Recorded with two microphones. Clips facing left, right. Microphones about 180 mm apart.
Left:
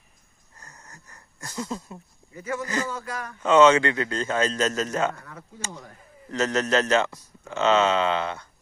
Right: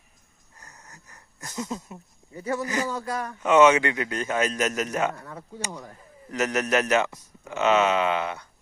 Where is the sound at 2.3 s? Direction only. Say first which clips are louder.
Right 2 dB; 35° right (ahead or behind).